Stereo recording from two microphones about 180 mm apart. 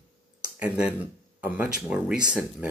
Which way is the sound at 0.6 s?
5° right (ahead or behind).